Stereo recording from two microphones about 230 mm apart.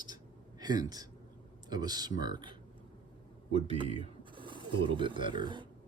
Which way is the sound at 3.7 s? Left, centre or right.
Right.